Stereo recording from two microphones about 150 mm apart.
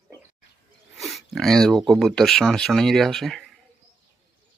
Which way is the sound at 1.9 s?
Centre (ahead or behind).